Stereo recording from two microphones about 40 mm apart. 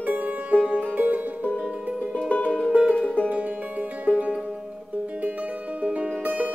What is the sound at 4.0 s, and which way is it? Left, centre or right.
Music, right.